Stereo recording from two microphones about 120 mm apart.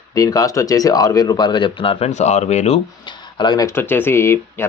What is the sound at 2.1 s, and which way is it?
Speech, 70° left (ahead or behind).